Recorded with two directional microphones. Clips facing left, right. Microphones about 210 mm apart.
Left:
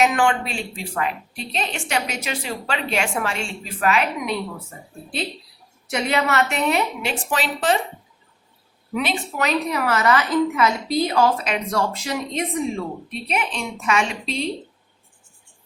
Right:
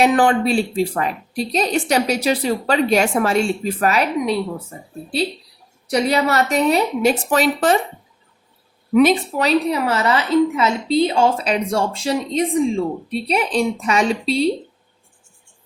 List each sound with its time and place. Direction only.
0.0 s a woman's voice: 35° right (ahead or behind)
5.9 s a woman's voice: 35° right (ahead or behind)
9.0 s a woman's voice: 40° right (ahead or behind)